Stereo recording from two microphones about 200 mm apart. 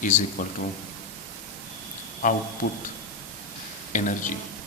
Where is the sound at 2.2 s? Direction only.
40° left (ahead or behind).